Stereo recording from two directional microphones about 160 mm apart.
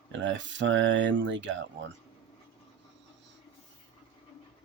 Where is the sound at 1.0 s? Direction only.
90° right.